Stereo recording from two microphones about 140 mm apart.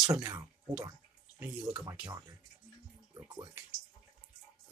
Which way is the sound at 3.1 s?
30° right (ahead or behind).